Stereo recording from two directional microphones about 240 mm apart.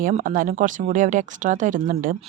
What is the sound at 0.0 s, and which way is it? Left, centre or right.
Speech, right.